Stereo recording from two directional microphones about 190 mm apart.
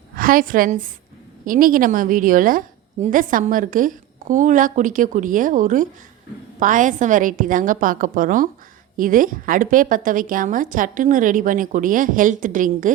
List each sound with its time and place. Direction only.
0.2 s a woman's voice: 45° right (ahead or behind)